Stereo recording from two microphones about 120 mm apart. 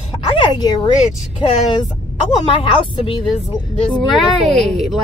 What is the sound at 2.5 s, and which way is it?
Speech, 45° left (ahead or behind).